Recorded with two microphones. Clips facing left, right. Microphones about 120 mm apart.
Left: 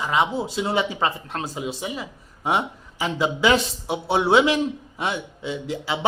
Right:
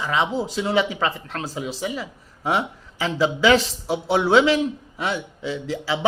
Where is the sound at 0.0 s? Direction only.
15° left (ahead or behind).